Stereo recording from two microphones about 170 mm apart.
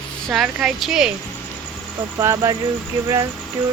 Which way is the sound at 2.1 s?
20° right (ahead or behind).